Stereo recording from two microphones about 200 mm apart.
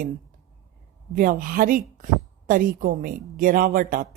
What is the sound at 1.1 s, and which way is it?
A woman's voice, 45° right (ahead or behind).